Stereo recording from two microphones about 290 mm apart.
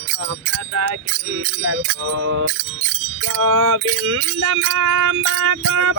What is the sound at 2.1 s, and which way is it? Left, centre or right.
Music, right.